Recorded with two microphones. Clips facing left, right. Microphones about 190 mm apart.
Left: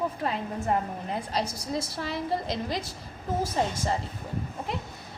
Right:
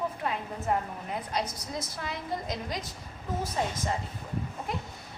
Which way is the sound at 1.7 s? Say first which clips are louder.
Left 5 dB; 30° left (ahead or behind).